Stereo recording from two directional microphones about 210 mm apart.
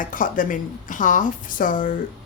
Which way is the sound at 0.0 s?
40° left (ahead or behind).